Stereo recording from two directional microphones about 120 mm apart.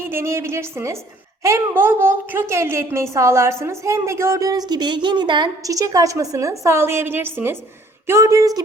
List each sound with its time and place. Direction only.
0.0 s a woman's voice: 20° right (ahead or behind)